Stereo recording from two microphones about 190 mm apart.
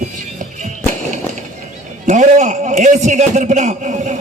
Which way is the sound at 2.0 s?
40° right (ahead or behind).